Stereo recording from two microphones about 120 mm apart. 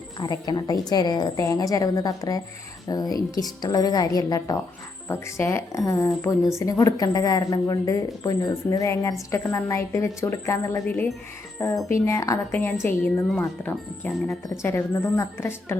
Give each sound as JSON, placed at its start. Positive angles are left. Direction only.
{"t": 0.2, "sound": "a woman's voice", "side_deg": 35}